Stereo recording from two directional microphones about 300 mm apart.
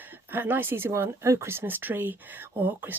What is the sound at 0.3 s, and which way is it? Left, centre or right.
Speech, centre.